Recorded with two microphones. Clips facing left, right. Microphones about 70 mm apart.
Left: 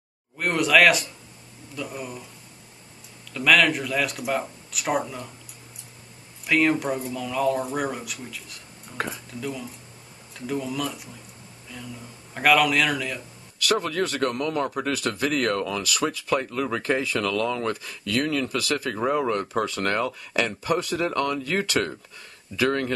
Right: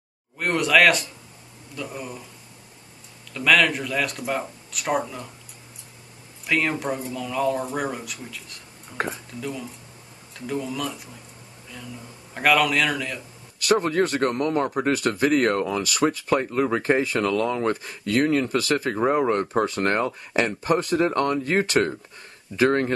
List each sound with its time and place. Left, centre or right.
0.4 s speech: centre
3.3 s speech: centre
6.4 s speech: centre
13.7 s speech: right